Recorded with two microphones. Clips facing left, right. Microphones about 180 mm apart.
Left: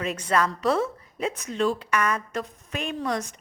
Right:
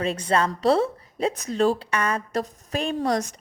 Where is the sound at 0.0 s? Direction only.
30° right (ahead or behind).